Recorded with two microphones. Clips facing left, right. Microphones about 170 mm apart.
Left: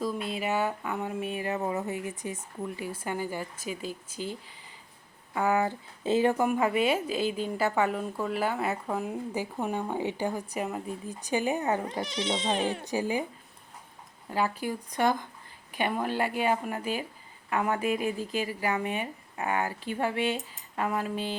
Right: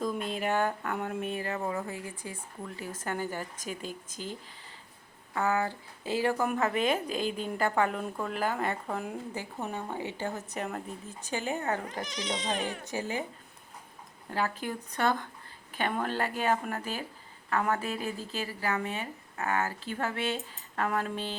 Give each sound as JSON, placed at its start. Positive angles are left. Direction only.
{"t": 0.3, "sound": "speech", "side_deg": 5}
{"t": 5.3, "sound": "a woman's voice", "side_deg": 15}
{"t": 11.9, "sound": "speech", "side_deg": 30}
{"t": 12.8, "sound": "speech", "side_deg": 15}
{"t": 14.3, "sound": "speech", "side_deg": 10}